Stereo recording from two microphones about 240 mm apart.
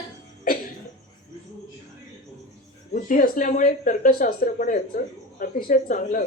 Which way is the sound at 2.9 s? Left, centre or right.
Left.